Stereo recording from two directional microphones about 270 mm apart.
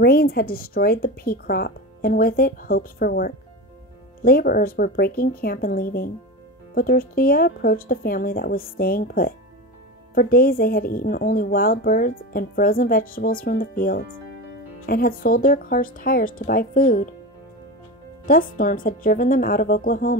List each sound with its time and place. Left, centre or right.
0.0 s a woman's voice: left
18.2 s a woman's voice: left